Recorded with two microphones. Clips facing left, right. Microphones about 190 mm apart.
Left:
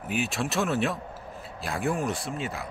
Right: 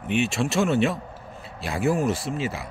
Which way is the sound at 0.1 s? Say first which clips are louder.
Right 5 dB; centre (ahead or behind).